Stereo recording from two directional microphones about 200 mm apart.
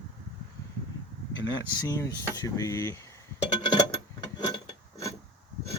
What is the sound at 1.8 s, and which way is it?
Speech, 15° left (ahead or behind).